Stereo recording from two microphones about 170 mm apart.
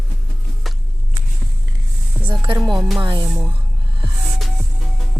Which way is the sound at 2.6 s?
Centre (ahead or behind).